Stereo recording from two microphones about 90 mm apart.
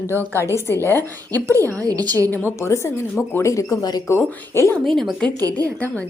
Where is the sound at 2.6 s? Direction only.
30° left (ahead or behind); by 4.0 s 50° left (ahead or behind).